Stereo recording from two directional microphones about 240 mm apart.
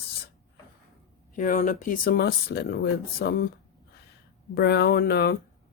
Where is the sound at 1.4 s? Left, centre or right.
Left.